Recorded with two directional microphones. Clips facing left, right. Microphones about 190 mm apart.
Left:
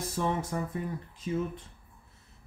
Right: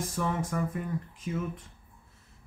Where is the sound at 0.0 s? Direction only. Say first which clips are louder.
Even; 30° left (ahead or behind).